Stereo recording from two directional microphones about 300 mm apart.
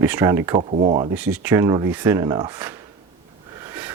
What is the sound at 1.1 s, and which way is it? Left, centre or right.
Speech, centre.